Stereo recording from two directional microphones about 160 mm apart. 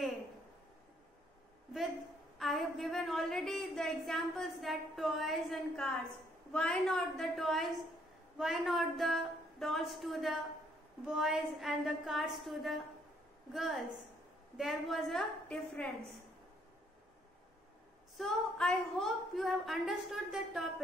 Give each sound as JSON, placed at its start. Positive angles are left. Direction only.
{"t": 2.3, "sound": "a woman's voice", "side_deg": 0}
{"t": 18.1, "sound": "a woman's voice", "side_deg": 0}